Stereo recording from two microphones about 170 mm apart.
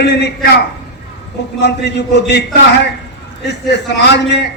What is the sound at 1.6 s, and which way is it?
Speech, 85° left.